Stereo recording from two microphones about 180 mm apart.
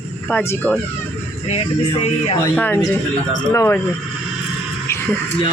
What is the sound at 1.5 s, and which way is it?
Speech, 35° left (ahead or behind).